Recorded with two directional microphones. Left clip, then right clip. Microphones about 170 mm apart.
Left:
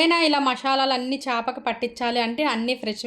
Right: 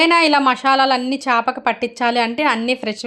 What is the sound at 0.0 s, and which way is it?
A woman's voice, 15° right (ahead or behind).